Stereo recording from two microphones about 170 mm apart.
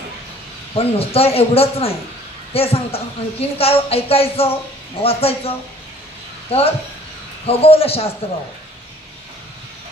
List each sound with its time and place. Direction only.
0.7 s a woman's voice: 35° left (ahead or behind)
6.5 s a woman's voice: 35° left (ahead or behind)